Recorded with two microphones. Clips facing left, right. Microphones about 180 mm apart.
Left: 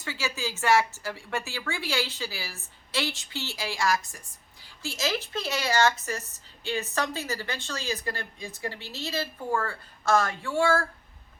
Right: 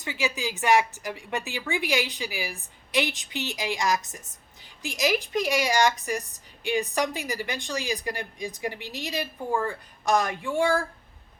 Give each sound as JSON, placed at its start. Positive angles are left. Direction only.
{"t": 0.0, "sound": "a woman's voice", "side_deg": -15}